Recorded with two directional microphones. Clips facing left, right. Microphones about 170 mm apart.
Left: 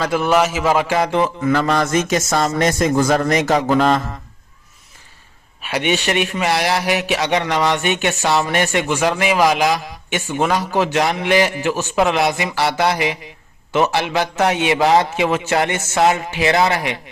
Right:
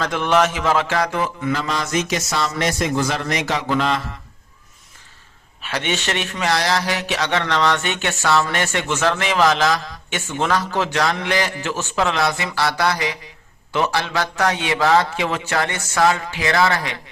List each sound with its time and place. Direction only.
0.0 s a man's voice: 10° left (ahead or behind)
1.2 s a sound: 40° left (ahead or behind)
1.5 s a man's voice: 55° left (ahead or behind)
5.6 s a man's voice: 15° left (ahead or behind)